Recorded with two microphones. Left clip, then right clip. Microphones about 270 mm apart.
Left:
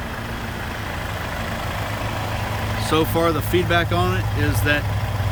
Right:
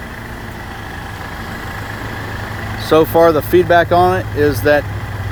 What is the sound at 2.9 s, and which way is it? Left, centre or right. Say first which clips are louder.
Speech: right 10 dB; centre.